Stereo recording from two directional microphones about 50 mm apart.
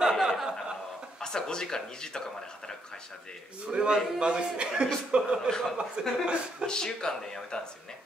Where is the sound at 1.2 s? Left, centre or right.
Centre.